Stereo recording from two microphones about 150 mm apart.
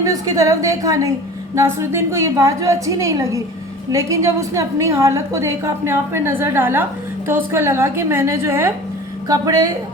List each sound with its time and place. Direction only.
0.0 s a woman's voice: 20° right (ahead or behind)